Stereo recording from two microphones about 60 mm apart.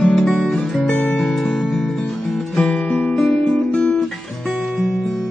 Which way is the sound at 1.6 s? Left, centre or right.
Centre.